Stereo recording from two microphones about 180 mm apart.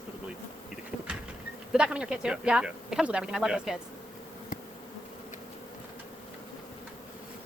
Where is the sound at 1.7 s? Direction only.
5° right (ahead or behind).